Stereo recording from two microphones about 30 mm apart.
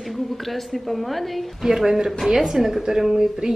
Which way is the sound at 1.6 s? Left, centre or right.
Centre.